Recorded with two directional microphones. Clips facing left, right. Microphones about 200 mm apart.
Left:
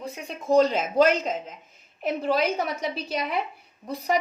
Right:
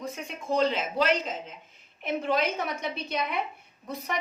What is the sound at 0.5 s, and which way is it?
A woman's voice, 45° left (ahead or behind).